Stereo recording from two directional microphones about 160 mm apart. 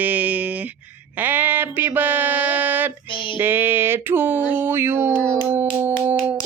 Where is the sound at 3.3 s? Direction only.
15° right (ahead or behind).